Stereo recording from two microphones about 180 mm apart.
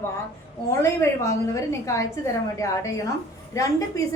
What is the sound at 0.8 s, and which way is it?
A woman's voice, 15° left (ahead or behind).